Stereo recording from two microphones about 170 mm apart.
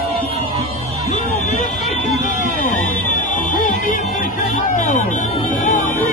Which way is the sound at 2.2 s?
50° left (ahead or behind).